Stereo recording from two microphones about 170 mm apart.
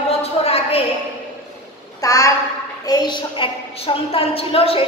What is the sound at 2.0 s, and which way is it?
A man's voice, 20° left (ahead or behind).